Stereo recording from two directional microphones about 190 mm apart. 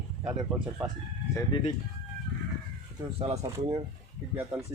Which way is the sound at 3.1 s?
35° right (ahead or behind).